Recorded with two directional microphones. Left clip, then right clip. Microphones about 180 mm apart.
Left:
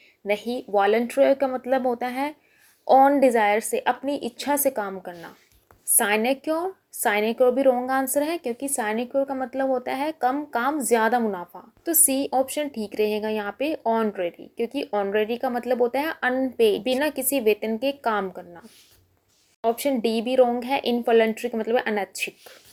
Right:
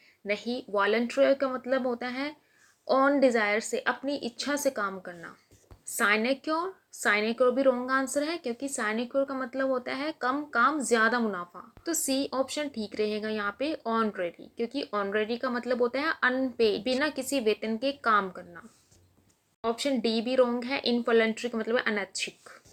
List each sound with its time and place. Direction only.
0.3 s speech: 25° left (ahead or behind)
19.6 s speech: 20° left (ahead or behind)